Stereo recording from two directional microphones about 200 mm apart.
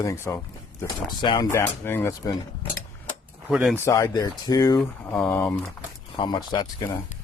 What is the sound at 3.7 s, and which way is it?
Speech, 15° left (ahead or behind).